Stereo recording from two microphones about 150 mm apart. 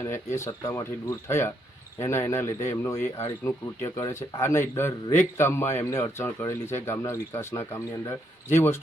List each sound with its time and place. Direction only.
0.0 s speech: 15° left (ahead or behind)